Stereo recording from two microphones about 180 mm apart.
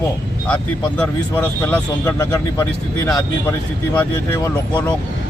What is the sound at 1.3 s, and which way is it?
Speech, 10° left (ahead or behind).